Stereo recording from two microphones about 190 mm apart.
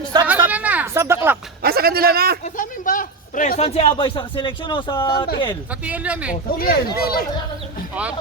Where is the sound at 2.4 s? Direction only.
45° left (ahead or behind); by 5.3 s 25° left (ahead or behind).